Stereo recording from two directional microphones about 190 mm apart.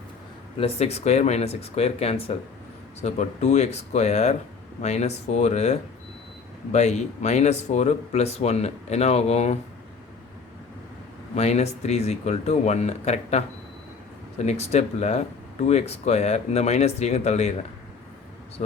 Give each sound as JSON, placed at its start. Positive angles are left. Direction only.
{"t": 0.6, "sound": "speech", "side_deg": 35}
{"t": 11.3, "sound": "speech", "side_deg": 35}